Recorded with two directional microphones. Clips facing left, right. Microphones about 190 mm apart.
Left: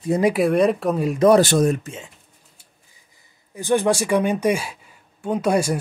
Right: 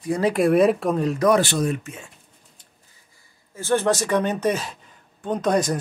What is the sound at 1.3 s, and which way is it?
Speech, 45° left (ahead or behind).